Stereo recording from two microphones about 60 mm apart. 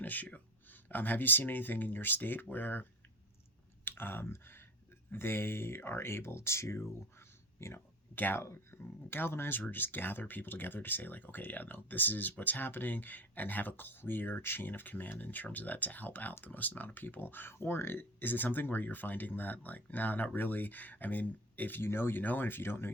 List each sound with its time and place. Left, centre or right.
0.0 s speech: left
3.8 s speech: left
8.1 s speech: left
8.4 s speech: left